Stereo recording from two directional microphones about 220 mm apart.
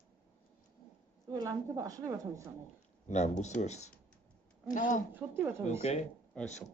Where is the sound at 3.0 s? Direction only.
30° left (ahead or behind).